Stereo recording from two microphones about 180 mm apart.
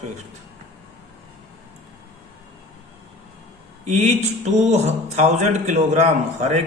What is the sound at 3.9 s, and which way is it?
Speech, 40° right (ahead or behind).